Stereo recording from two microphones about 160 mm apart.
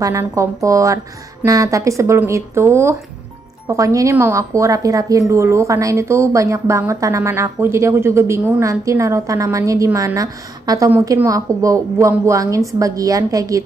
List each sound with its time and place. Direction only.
0.0 s speech: 15° right (ahead or behind)